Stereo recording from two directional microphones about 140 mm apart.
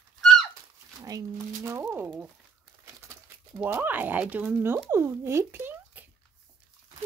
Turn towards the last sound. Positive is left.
turn(degrees=-15)  # may be behind; listen again after turning